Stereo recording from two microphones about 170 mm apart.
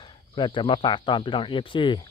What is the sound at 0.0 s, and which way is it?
Speech, 30° left (ahead or behind).